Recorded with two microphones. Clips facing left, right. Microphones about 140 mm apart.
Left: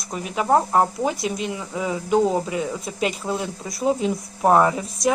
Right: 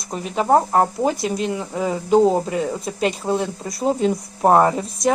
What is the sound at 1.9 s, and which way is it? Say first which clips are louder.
Speech: right 4 dB; 35° right (ahead or behind).